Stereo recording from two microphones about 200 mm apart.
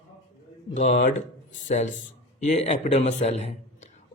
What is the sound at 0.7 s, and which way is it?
A man's voice, 35° left (ahead or behind).